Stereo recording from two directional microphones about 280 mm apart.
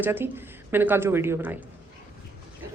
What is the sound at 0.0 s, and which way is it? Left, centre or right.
Speech, centre.